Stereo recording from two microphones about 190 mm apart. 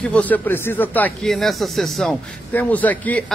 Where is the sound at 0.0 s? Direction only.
5° left (ahead or behind).